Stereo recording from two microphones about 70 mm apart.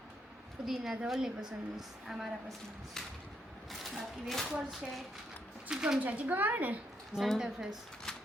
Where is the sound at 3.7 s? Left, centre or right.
Centre.